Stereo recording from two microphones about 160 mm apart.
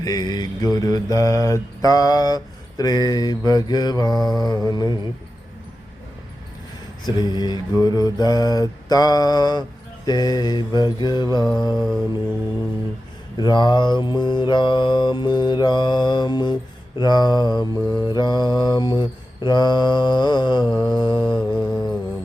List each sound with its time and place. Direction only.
0.0 s mantra: 25° left (ahead or behind)
7.0 s mantra: 25° left (ahead or behind)
11.8 s music: centre (ahead or behind)
13.3 s mantra: 30° left (ahead or behind)
21.3 s humming: 10° left (ahead or behind)